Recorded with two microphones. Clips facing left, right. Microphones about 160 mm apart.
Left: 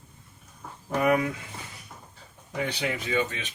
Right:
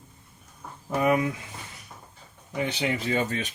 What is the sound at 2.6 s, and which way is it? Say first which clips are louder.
Speech: right 3 dB; 30° right (ahead or behind).